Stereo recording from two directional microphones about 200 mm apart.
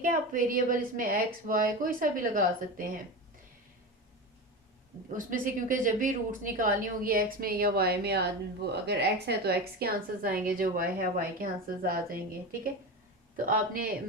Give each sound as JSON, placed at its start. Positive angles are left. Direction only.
{"t": 0.0, "sound": "a woman's voice", "side_deg": -40}
{"t": 5.0, "sound": "a woman's voice", "side_deg": -40}